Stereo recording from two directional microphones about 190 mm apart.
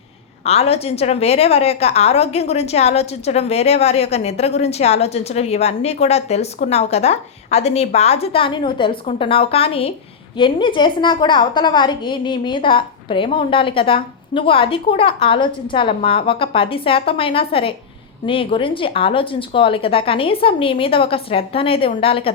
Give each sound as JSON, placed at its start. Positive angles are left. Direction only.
{"t": 0.4, "sound": "a woman's voice", "side_deg": 30}